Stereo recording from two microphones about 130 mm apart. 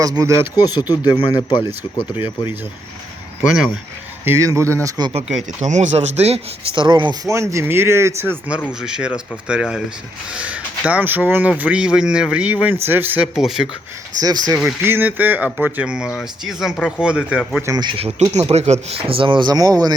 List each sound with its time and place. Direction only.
0.0 s speech: 25° right (ahead or behind)
0.5 s speech: 30° left (ahead or behind)
4.3 s speech: 20° right (ahead or behind)
5.5 s speech: 65° right (ahead or behind)
6.7 s speech: 40° right (ahead or behind)
7.3 s speech: 25° right (ahead or behind)
13.2 s speech: 5° right (ahead or behind)
14.2 s speech: 30° right (ahead or behind)
14.5 s speech: 10° right (ahead or behind)
17.7 s speech: 35° right (ahead or behind)
18.4 s speech: 55° right (ahead or behind); by 19.9 s 30° right (ahead or behind)